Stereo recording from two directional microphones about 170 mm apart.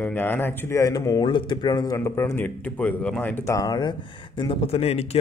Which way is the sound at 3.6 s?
25° left (ahead or behind).